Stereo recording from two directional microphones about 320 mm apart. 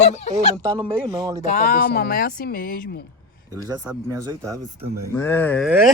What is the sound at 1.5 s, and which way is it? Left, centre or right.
Speech, left.